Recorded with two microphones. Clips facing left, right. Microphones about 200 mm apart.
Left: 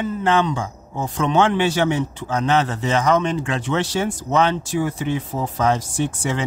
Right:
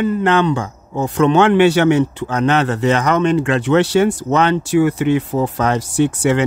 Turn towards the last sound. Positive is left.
turn(degrees=-70)  # may be behind; listen again after turning